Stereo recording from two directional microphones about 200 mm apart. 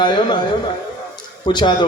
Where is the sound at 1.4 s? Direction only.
20° left (ahead or behind).